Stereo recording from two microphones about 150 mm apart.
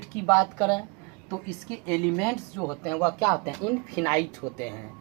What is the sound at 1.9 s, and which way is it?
Speech, 5° left (ahead or behind).